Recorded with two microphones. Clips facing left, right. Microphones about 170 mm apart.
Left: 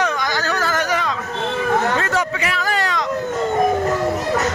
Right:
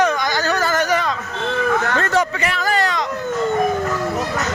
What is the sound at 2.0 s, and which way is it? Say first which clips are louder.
A man's voice: right 2 dB; centre (ahead or behind).